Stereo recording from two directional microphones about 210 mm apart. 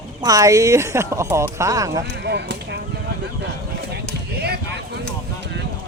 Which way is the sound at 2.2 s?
55° right (ahead or behind).